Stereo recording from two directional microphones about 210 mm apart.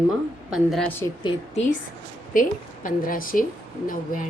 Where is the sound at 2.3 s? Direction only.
40° left (ahead or behind).